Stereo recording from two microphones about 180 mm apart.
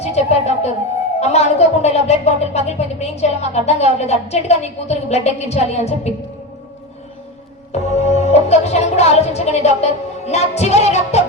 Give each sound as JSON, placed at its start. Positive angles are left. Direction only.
{"t": 0.0, "sound": "a woman's voice", "side_deg": 35}
{"t": 7.7, "sound": "music", "side_deg": 35}